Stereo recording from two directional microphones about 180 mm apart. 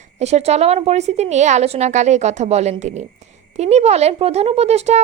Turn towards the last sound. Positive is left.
turn(degrees=-35)  # may be behind; listen again after turning